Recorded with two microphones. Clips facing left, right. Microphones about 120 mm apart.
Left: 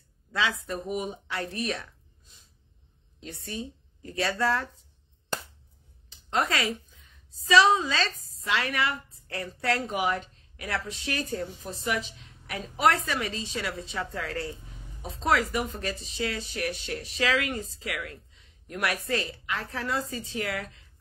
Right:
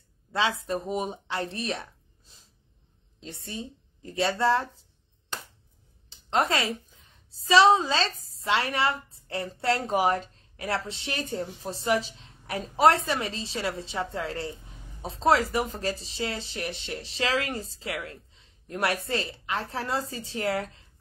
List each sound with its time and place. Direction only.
0.3 s speech: 30° right (ahead or behind)
6.0 s a woman's voice: 25° right (ahead or behind)